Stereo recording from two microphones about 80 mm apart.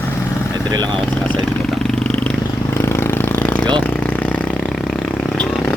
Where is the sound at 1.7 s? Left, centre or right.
Centre.